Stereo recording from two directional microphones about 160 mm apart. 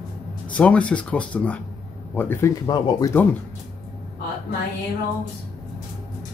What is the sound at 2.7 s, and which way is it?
Speech, 25° left (ahead or behind).